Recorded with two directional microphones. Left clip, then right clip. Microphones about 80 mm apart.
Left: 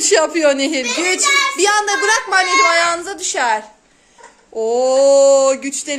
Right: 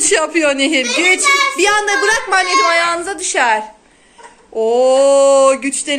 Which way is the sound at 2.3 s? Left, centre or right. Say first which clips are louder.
Even; left.